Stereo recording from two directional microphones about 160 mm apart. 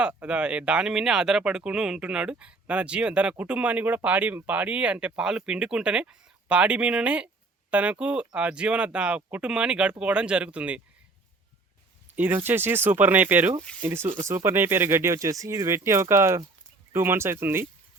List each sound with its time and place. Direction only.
0.0 s speech: 5° right (ahead or behind)
12.1 s speech: 10° right (ahead or behind)